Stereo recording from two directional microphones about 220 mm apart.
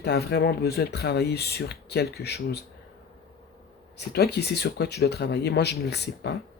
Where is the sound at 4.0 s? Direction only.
45° left (ahead or behind).